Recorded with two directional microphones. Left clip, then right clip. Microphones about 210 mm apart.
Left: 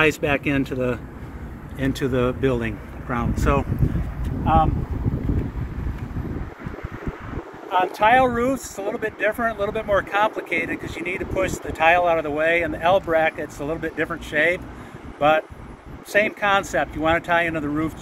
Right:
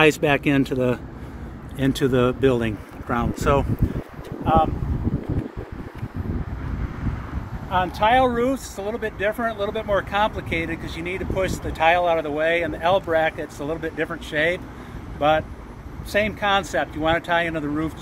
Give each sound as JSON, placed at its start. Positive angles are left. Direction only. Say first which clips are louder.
{"t": 0.0, "sound": "speech", "louder": "right 2 dB", "side_deg": -50}
{"t": 7.7, "sound": "speech", "louder": "left 2 dB", "side_deg": -5}